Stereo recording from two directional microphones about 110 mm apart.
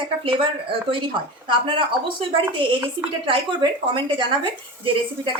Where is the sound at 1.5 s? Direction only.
50° right (ahead or behind).